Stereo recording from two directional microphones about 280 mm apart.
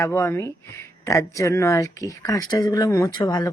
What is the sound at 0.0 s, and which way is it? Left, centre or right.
Speech, centre.